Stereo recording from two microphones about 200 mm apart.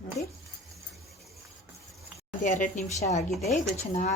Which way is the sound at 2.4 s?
40° left (ahead or behind).